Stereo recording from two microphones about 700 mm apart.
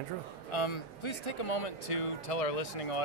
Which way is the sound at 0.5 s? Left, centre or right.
Left.